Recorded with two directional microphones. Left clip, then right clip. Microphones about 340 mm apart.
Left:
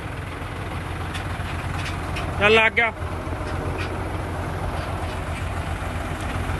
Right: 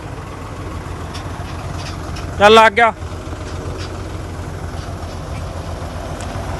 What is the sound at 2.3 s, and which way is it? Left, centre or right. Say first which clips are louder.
Speech: right 9 dB; centre.